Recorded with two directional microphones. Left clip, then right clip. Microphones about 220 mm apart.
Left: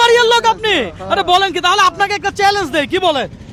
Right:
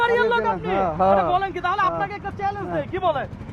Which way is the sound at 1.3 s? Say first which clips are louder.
Left 10 dB; 90° left.